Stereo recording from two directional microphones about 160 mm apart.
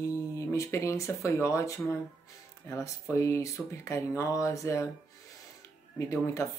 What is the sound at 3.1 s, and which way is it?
Speech, 15° left (ahead or behind).